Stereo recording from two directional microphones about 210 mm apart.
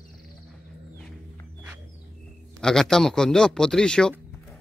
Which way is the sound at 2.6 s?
5° left (ahead or behind).